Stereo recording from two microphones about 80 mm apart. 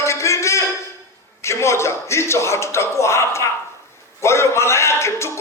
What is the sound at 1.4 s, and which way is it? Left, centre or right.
A man's voice, left.